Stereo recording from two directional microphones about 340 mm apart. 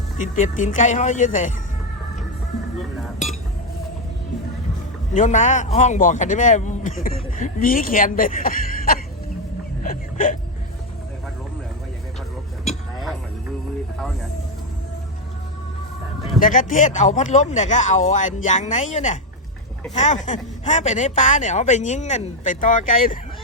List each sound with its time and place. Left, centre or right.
0.2 s speech: left
5.1 s speech: left
9.8 s a sound: left
16.4 s speech: left